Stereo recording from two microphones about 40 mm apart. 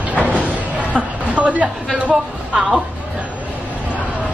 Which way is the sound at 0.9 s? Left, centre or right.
Right.